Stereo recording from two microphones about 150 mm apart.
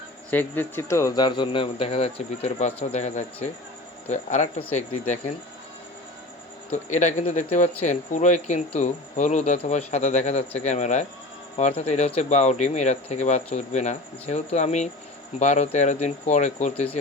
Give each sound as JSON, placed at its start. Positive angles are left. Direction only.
{"t": 0.3, "sound": "speech", "side_deg": 15}
{"t": 6.7, "sound": "speech", "side_deg": 50}